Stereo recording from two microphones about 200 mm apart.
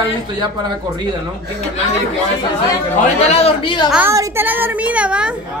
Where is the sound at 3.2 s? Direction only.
30° left (ahead or behind).